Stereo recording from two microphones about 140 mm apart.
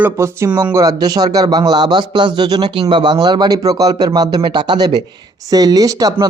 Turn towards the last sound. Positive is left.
turn(degrees=-25)  # may be behind; listen again after turning